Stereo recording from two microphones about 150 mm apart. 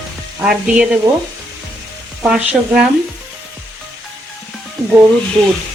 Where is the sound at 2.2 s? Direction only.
5° right (ahead or behind).